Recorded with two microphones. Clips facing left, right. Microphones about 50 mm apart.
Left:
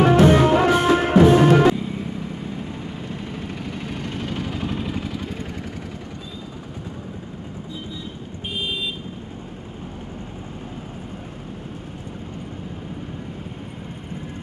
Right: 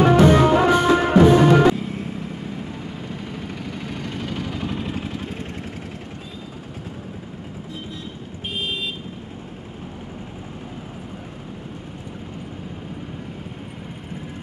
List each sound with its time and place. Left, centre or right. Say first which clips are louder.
0.0 s music: even; centre
3.8 s vehicle: even; left
4.5 s vehicle: even; centre
5.1 s vehicle: even; right